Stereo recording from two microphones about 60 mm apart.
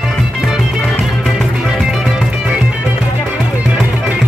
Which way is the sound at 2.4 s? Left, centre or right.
Right.